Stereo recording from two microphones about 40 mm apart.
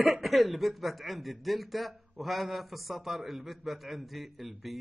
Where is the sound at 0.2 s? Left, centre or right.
Centre.